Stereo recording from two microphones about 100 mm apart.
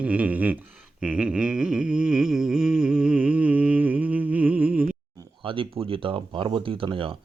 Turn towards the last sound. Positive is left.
turn(degrees=-60)  # may be behind; listen again after turning